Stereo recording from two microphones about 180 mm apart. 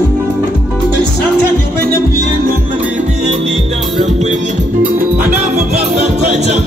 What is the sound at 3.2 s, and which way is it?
Music, 40° right (ahead or behind).